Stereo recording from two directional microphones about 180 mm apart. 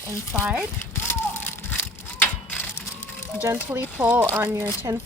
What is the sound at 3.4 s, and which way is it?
Speech, 15° right (ahead or behind).